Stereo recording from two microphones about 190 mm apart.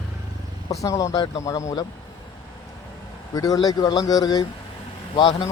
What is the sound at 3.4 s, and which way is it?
Speech, 20° left (ahead or behind).